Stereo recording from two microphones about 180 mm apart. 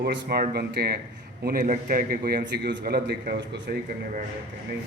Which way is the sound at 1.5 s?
50° right (ahead or behind).